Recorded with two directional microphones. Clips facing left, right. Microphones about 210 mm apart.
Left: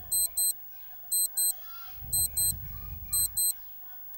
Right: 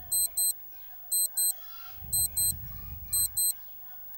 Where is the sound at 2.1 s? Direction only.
Centre (ahead or behind).